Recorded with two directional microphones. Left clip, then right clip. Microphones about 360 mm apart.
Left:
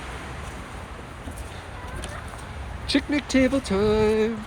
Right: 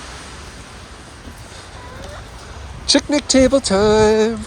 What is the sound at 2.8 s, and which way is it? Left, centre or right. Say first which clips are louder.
Speech: right 9 dB; centre.